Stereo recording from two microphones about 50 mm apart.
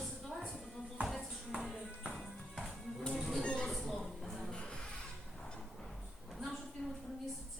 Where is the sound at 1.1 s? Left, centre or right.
Centre.